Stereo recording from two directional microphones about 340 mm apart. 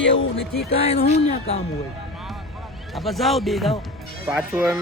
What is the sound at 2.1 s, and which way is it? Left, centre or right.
Vehicle, centre.